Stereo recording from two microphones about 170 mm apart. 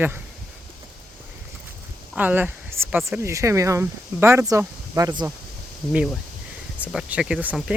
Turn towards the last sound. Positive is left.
turn(degrees=-5)  # may be behind; listen again after turning